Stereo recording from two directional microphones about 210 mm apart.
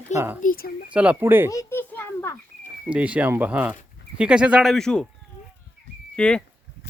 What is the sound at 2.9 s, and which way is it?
Speech, 5° right (ahead or behind).